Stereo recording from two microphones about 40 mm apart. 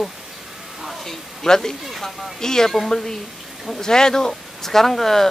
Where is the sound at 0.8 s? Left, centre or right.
Centre.